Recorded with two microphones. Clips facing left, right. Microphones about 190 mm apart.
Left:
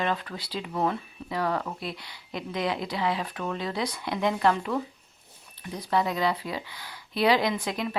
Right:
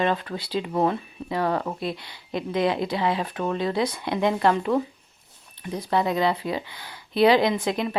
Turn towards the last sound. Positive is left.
turn(degrees=-25)  # may be behind; listen again after turning